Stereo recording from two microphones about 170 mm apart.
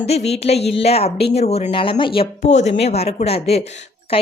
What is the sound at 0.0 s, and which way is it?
Speech, 35° left (ahead or behind).